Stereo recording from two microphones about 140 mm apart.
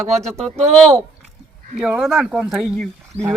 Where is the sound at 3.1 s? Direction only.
50° right (ahead or behind).